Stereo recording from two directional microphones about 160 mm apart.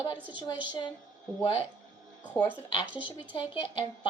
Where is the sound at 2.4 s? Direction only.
20° left (ahead or behind).